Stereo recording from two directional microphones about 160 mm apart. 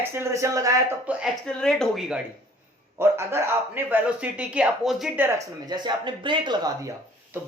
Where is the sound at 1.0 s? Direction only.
Centre (ahead or behind).